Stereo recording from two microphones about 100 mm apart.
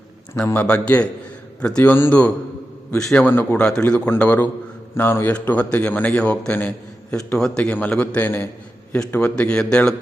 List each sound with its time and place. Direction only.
0.4 s a man's voice: 20° left (ahead or behind)